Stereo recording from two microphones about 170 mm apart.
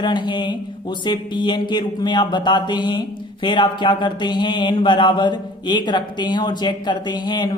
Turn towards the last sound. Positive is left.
turn(degrees=25)  # may be behind; listen again after turning